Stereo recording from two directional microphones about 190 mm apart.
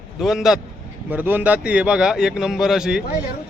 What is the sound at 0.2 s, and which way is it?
Speech, centre (ahead or behind).